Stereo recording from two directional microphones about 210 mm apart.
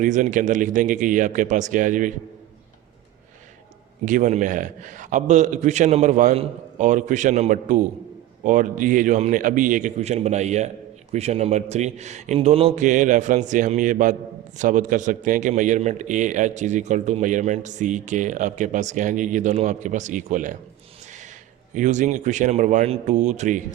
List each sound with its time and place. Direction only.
0.0 s a man's voice: 35° right (ahead or behind)
4.0 s a man's voice: 35° right (ahead or behind)
21.8 s a man's voice: 35° right (ahead or behind)